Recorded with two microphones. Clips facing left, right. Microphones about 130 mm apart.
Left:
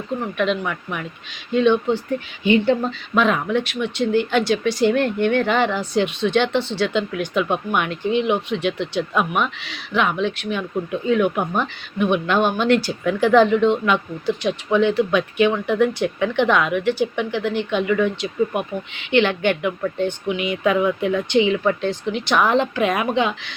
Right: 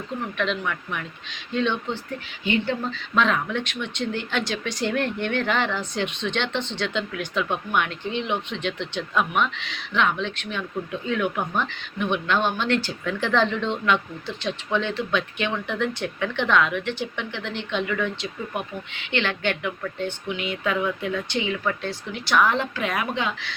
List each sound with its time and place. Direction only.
0.3 s a woman's voice: 5° left (ahead or behind)